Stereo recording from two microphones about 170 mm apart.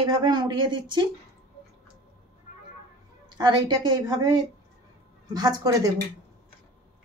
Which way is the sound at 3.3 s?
25° right (ahead or behind).